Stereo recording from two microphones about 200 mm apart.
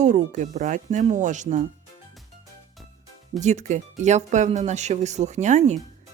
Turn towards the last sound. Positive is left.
turn(degrees=-35)  # may be behind; listen again after turning